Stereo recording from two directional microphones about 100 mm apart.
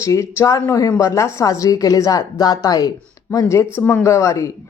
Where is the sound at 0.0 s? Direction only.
30° left (ahead or behind).